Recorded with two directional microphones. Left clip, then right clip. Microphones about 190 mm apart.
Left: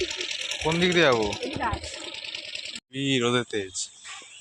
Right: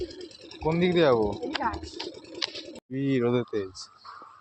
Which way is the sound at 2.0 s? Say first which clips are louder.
Even; 45° right (ahead or behind).